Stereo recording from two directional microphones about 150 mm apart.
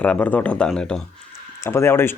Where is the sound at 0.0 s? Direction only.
10° left (ahead or behind).